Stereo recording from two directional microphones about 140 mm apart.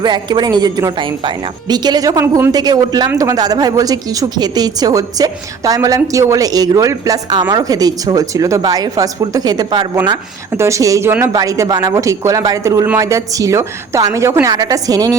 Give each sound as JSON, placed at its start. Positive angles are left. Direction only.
{"t": 0.0, "sound": "speech", "side_deg": -30}